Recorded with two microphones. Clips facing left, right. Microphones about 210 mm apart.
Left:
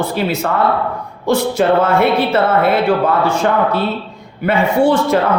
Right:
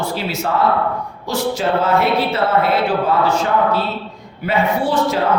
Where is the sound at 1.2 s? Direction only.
55° left (ahead or behind).